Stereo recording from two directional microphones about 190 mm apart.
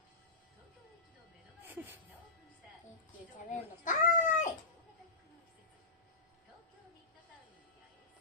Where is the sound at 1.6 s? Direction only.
10° right (ahead or behind).